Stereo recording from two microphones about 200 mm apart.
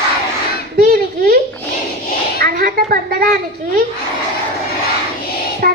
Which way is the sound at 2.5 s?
45° right (ahead or behind).